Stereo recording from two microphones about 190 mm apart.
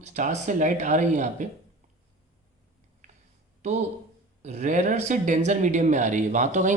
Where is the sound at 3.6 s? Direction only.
35° right (ahead or behind).